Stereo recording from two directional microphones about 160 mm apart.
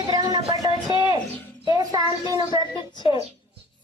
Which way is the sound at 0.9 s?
25° right (ahead or behind).